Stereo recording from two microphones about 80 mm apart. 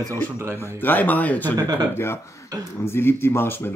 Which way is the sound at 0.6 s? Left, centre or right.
Left.